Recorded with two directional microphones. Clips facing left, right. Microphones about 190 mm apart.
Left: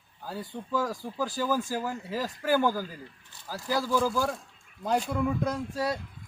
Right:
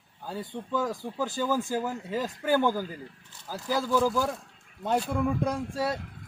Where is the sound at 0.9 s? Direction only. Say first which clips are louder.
Right 1 dB; 20° right (ahead or behind).